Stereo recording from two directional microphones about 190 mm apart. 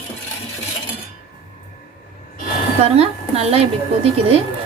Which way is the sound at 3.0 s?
35° right (ahead or behind).